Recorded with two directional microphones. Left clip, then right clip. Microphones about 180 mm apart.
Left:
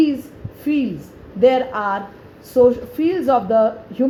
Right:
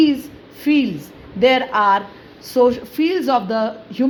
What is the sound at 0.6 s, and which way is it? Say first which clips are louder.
A woman's voice: right 3 dB; 35° right (ahead or behind).